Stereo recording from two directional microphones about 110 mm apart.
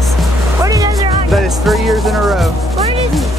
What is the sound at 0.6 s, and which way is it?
Music, 30° right (ahead or behind).